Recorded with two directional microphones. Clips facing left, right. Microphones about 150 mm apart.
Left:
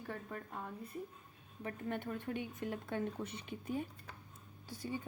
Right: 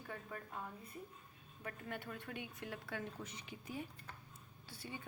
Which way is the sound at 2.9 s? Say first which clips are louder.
Left 7 dB; 55° left (ahead or behind).